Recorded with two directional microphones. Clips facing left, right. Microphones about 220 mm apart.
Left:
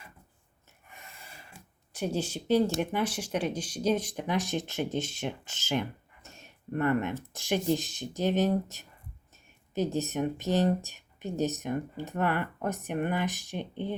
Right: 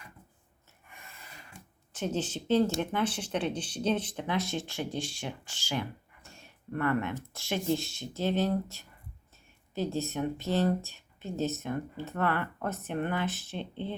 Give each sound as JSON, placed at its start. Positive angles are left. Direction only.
{"t": 1.9, "sound": "speech", "side_deg": 10}